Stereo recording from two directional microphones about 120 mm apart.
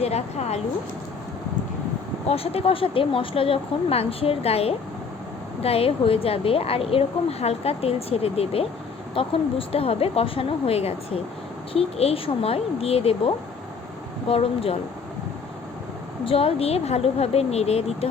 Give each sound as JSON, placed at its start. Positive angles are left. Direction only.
{"t": 0.0, "sound": "a woman's voice", "side_deg": 60}
{"t": 2.2, "sound": "a woman's voice", "side_deg": 55}
{"t": 16.2, "sound": "a woman's voice", "side_deg": 55}